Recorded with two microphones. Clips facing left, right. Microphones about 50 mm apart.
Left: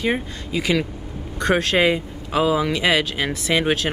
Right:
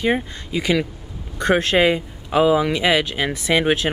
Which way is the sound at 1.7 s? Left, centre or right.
Centre.